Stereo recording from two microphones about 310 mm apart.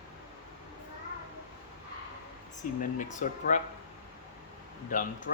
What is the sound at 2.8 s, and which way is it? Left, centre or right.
Speech, left.